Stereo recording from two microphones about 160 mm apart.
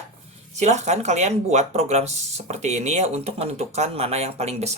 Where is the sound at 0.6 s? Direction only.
45° right (ahead or behind).